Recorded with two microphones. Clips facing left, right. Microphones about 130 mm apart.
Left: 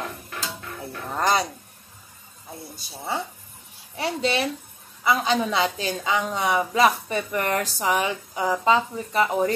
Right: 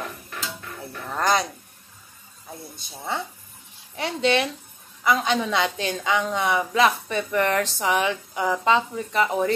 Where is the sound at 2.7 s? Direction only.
10° left (ahead or behind).